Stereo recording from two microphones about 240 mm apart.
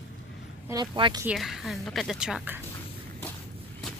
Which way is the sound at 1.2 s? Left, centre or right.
Centre.